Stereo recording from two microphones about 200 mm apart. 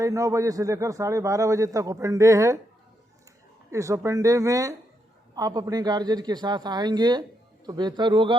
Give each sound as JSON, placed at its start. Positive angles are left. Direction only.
{"t": 0.0, "sound": "a man's voice", "side_deg": -15}
{"t": 3.7, "sound": "a man's voice", "side_deg": -15}